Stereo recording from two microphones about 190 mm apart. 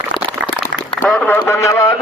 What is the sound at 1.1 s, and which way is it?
Speech, 10° left (ahead or behind).